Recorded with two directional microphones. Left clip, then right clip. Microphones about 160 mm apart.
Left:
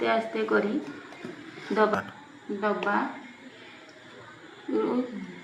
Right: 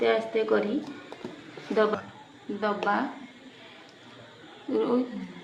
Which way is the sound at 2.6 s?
40° right (ahead or behind).